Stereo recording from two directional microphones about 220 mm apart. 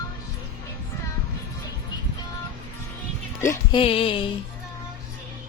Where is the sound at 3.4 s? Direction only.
15° left (ahead or behind).